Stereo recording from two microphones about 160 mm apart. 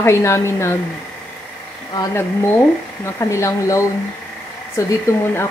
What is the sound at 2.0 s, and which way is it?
Speech, 15° left (ahead or behind).